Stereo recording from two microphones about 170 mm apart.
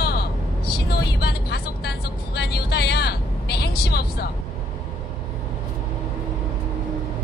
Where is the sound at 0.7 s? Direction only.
70° left (ahead or behind).